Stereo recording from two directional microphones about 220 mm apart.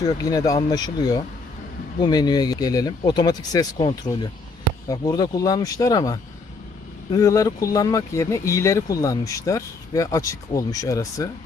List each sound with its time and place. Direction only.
0.2 s speech: 15° left (ahead or behind)